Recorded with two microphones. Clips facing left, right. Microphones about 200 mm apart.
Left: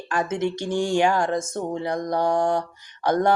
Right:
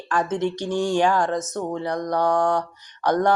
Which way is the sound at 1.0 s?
25° left (ahead or behind).